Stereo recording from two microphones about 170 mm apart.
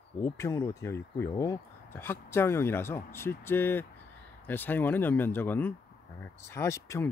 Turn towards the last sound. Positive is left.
turn(degrees=15)  # may be behind; listen again after turning